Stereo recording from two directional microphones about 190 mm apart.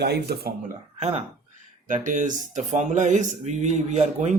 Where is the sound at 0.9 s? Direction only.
35° right (ahead or behind).